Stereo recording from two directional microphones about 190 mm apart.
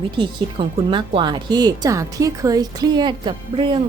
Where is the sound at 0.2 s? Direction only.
25° right (ahead or behind).